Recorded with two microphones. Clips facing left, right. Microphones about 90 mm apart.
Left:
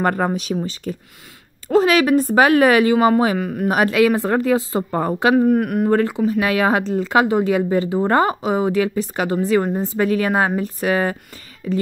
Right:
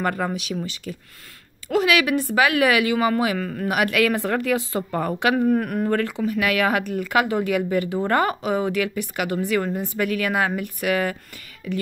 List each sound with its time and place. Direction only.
0.0 s a woman's voice: 45° left (ahead or behind)
3.3 s speech: 15° left (ahead or behind)
3.6 s speech: 30° left (ahead or behind)
5.3 s speech: 10° left (ahead or behind)
5.9 s a woman's voice: 20° left (ahead or behind)